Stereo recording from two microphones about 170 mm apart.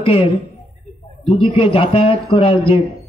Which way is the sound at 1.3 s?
30° left (ahead or behind).